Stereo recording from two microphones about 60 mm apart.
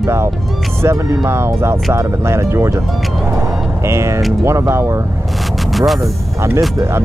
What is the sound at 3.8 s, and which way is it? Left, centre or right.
Speech, right.